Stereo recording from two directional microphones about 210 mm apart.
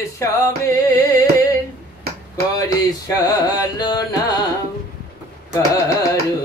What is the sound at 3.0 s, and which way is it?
Music, 15° left (ahead or behind).